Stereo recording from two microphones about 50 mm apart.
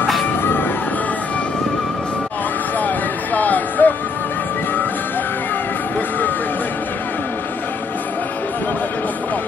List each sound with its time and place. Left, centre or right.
0.4 s music: left
3.3 s music: left